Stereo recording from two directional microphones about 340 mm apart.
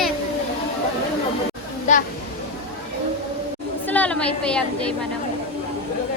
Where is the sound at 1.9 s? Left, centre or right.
Left.